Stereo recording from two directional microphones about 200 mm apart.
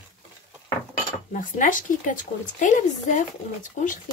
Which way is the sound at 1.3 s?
40° left (ahead or behind).